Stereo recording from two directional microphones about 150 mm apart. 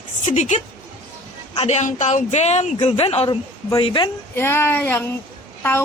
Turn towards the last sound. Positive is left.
turn(degrees=15)  # may be behind; listen again after turning